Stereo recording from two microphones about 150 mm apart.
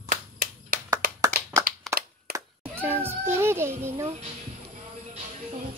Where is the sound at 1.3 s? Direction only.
90° right.